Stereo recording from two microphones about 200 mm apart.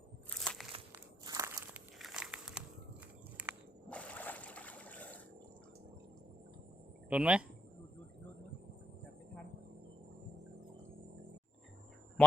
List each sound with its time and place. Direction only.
0.3 s crushing: 5° left (ahead or behind)
0.9 s walk: 15° right (ahead or behind)
2.0 s crumpling: centre (ahead or behind)
3.4 s walk: 5° right (ahead or behind)
3.8 s a sound: 5° left (ahead or behind)
7.1 s speech: 5° right (ahead or behind)